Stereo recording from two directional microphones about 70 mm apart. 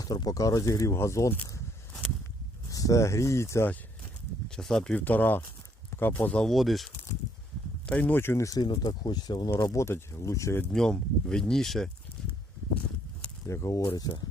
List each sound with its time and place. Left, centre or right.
0.0 s speech: left
2.6 s speech: left
4.4 s speech: centre
4.9 s speech: left
6.3 s speech: centre
7.9 s speech: left
8.4 s speech: left
9.6 s speech: left
10.7 s speech: centre
13.5 s speech: left
13.8 s speech: left